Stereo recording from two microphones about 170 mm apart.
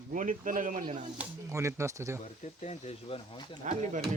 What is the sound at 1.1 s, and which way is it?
Speech, 10° right (ahead or behind).